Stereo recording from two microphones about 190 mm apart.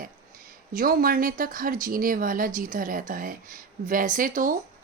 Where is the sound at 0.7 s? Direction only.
50° right (ahead or behind).